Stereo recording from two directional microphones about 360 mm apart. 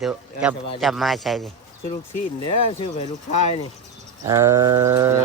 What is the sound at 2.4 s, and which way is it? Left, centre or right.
Speech, centre.